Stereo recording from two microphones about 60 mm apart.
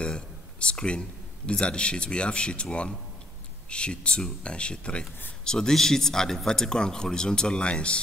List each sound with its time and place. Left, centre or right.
0.0 s speech: centre